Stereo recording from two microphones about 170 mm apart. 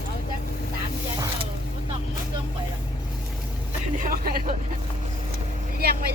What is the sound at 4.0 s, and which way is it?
Speech, 50° right (ahead or behind).